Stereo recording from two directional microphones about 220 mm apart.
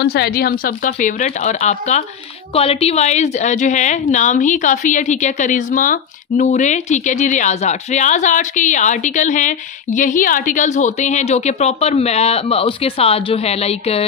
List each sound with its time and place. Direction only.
0.0 s a woman's voice: 45° left (ahead or behind); by 14.0 s 30° left (ahead or behind)